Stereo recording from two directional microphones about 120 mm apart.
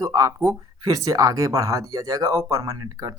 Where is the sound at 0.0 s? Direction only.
30° right (ahead or behind).